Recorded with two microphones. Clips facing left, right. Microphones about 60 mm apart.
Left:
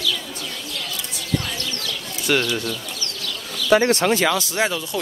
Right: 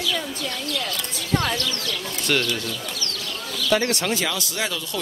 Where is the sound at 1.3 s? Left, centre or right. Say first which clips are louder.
Right 4 dB; right.